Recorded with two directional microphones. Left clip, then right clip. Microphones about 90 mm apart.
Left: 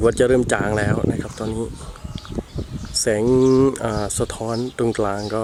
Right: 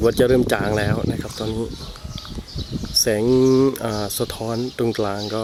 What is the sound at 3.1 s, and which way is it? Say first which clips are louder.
Speech: left 1 dB; 10° left (ahead or behind).